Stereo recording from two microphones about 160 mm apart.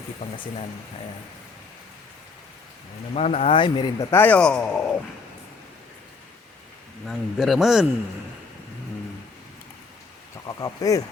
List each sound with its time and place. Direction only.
3.2 s speech: 40° left (ahead or behind)
4.1 s speech: 10° left (ahead or behind)
7.1 s speech: centre (ahead or behind)
10.4 s speech: 20° left (ahead or behind)